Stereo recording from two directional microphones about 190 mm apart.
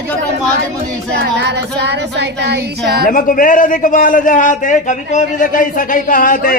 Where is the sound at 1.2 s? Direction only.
60° right (ahead or behind).